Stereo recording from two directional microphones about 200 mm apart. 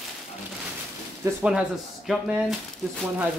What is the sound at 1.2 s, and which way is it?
Speech, 5° right (ahead or behind).